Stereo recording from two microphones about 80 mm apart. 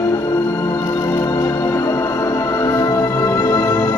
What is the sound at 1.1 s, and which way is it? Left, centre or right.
Music, left.